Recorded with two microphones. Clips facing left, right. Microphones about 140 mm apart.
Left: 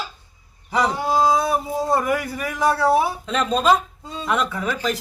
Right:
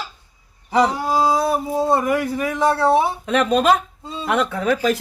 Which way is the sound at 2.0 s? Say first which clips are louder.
Right 3 dB; centre (ahead or behind).